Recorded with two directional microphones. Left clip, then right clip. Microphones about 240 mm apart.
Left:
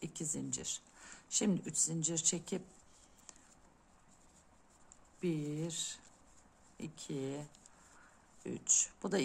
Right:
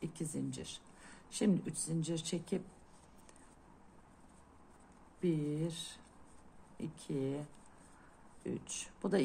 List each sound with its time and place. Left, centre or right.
0.0 s speech: centre
5.2 s speech: centre
8.5 s speech: centre